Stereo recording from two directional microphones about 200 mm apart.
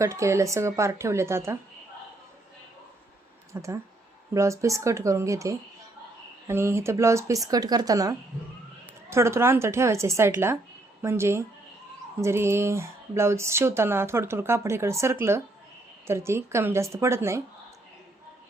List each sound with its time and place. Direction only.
0.0 s speech: 15° right (ahead or behind)
3.5 s speech: 15° right (ahead or behind)